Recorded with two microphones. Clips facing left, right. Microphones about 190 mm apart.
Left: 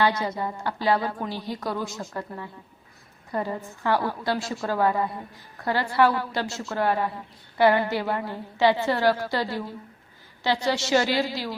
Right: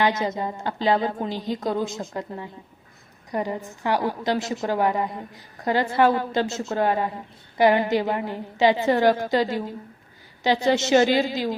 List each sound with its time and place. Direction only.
0.0 s a woman's voice: 20° right (ahead or behind)